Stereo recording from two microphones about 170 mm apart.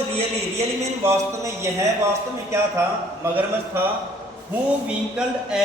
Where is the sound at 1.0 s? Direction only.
15° right (ahead or behind).